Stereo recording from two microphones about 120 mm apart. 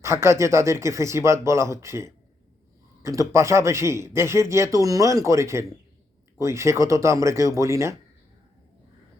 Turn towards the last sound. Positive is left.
turn(degrees=-25)  # may be behind; listen again after turning